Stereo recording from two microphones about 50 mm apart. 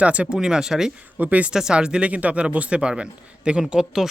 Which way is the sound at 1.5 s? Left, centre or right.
Centre.